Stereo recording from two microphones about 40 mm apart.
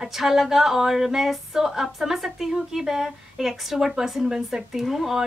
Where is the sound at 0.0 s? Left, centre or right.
Centre.